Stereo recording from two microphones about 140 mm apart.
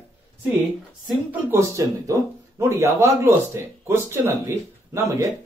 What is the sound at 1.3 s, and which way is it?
Speech, 20° right (ahead or behind).